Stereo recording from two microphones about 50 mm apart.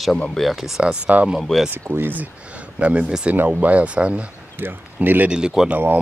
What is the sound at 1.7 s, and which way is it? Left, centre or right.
Speech, right.